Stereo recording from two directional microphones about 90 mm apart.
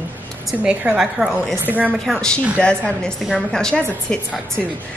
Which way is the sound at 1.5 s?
20° right (ahead or behind).